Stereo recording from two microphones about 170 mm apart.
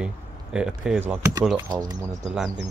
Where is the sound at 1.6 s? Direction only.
25° right (ahead or behind).